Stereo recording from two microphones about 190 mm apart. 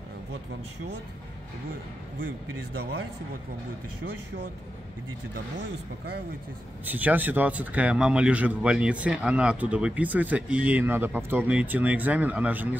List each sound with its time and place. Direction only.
5.3 s speech: 60° right (ahead or behind)
6.9 s speech: 10° right (ahead or behind)